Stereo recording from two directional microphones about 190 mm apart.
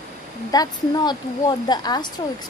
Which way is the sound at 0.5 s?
20° left (ahead or behind).